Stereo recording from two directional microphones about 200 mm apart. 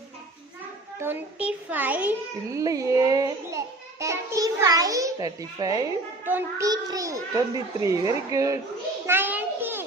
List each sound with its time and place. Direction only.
0.9 s a child's voice: 10° right (ahead or behind)
9.0 s children playing: 10° right (ahead or behind)